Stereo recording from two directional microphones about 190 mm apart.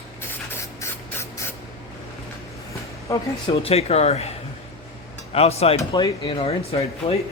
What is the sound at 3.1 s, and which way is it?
A woman's voice, 25° left (ahead or behind).